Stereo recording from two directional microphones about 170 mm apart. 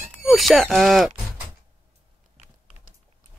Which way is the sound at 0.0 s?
Centre (ahead or behind).